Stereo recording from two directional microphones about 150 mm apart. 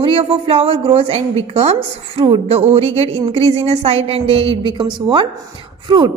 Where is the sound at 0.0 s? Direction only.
35° right (ahead or behind).